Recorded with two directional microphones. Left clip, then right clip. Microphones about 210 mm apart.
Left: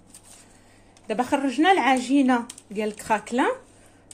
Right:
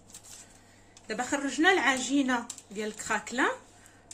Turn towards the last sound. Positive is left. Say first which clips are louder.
# left 5 dB
turn(degrees=20)  # may be behind; listen again after turning